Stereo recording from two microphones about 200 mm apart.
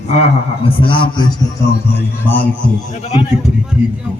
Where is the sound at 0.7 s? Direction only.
25° left (ahead or behind).